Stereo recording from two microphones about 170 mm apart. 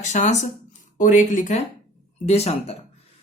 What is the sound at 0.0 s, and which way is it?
Speech, 45° left (ahead or behind).